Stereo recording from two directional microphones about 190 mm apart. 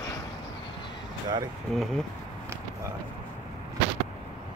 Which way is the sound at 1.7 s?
Centre (ahead or behind).